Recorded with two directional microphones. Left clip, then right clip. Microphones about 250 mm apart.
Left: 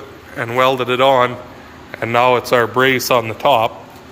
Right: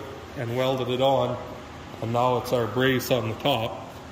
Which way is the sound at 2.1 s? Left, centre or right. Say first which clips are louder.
Left 11 dB; left.